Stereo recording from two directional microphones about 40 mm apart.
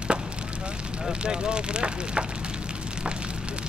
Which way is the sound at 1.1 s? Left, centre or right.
Right.